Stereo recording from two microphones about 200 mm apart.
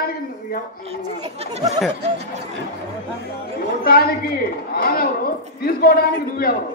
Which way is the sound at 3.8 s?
50° left (ahead or behind).